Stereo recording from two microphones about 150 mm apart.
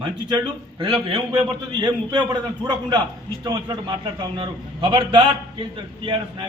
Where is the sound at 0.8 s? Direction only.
35° right (ahead or behind).